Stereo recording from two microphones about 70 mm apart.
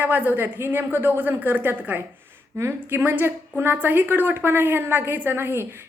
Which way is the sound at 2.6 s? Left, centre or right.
Right.